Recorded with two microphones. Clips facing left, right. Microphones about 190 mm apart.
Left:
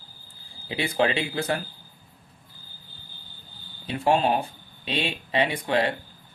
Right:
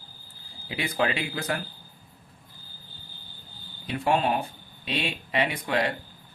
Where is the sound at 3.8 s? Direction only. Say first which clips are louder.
Left 2 dB; 30° left (ahead or behind).